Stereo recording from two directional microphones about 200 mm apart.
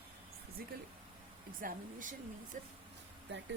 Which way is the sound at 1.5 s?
40° right (ahead or behind).